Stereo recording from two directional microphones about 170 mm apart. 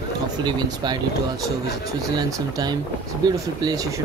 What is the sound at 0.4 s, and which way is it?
Speech, 25° right (ahead or behind).